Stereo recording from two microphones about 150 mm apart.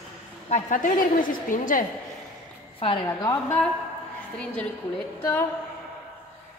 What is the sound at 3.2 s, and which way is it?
Speech, 15° left (ahead or behind).